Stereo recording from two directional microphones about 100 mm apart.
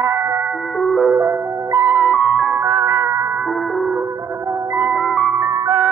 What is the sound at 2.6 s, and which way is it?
Music, 25° right (ahead or behind).